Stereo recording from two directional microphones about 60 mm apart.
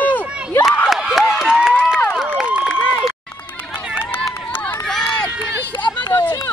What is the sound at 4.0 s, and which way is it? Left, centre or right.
Run, left.